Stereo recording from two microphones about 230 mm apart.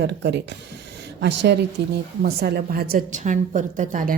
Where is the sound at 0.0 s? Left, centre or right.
Right.